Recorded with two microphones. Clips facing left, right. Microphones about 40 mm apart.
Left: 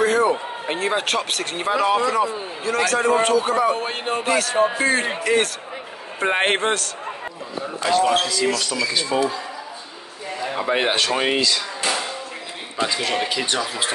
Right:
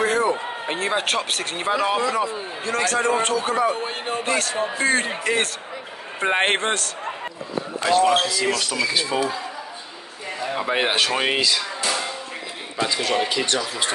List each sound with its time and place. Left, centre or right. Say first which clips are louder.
0.0 s a sound: left 3 dB; centre
0.3 s a man's voice: left 1 dB; centre
3.7 s speech: left 2 dB; left
4.2 s a man's voice: left 5 dB; centre
10.4 s a man's voice: left 1 dB; centre
12.7 s speech: even; centre